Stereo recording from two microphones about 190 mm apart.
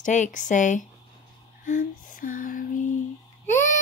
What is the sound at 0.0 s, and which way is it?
Speech, 40° left (ahead or behind).